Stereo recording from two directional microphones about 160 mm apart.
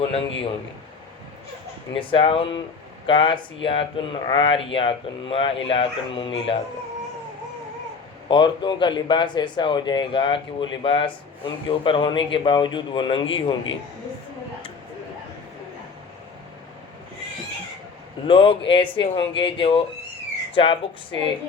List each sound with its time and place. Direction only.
1.9 s speech: 35° left (ahead or behind)
8.3 s speech: 30° left (ahead or behind)
18.3 s speech: 35° left (ahead or behind)